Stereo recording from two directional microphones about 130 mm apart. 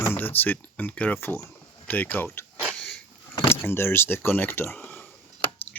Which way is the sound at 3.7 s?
20° left (ahead or behind).